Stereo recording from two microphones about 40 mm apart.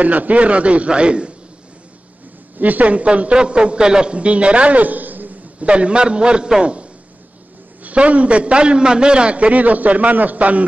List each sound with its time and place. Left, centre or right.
0.0 s a man's voice: right
2.6 s a man's voice: right
5.6 s a man's voice: right